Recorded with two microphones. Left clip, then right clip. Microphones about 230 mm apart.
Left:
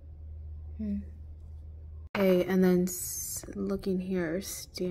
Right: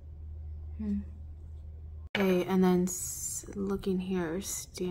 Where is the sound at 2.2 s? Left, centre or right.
Centre.